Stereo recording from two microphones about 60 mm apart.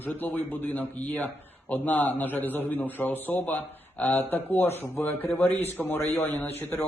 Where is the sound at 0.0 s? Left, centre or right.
Left.